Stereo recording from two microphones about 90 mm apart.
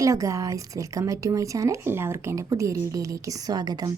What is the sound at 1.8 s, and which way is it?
A woman's voice, 25° right (ahead or behind).